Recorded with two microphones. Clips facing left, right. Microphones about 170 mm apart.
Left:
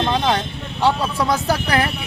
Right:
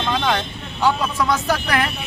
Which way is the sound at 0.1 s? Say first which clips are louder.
Left 2 dB; 30° left (ahead or behind).